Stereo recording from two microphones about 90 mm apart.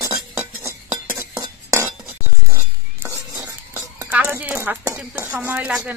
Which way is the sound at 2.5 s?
30° right (ahead or behind).